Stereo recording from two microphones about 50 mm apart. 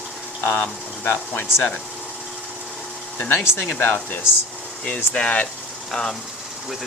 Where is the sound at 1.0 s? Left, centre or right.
Left.